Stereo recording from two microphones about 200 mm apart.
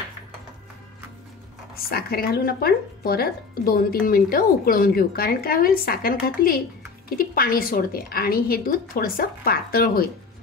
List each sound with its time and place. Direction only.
1.8 s speech: 50° left (ahead or behind)